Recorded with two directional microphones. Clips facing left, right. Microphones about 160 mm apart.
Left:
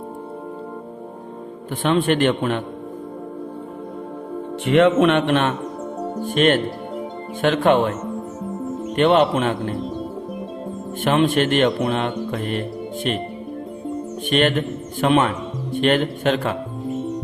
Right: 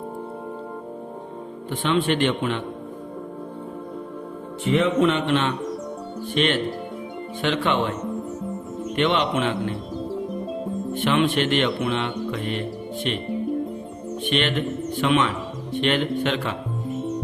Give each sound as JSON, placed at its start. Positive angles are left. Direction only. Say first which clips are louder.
{"t": 1.8, "sound": "speech", "louder": "left 4 dB", "side_deg": 45}
{"t": 4.6, "sound": "speech", "louder": "left 5 dB", "side_deg": 65}
{"t": 9.0, "sound": "speech", "louder": "left 6 dB", "side_deg": 45}
{"t": 10.9, "sound": "speech", "louder": "left 4 dB", "side_deg": 45}
{"t": 14.3, "sound": "speech", "louder": "left 5 dB", "side_deg": 45}